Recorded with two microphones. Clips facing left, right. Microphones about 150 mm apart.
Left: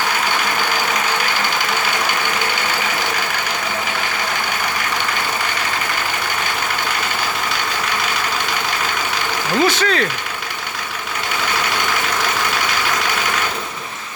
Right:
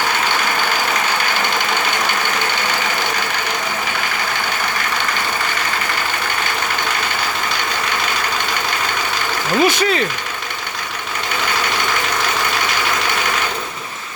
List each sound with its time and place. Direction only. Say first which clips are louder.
9.6 s speech: right 1 dB; 15° right (ahead or behind)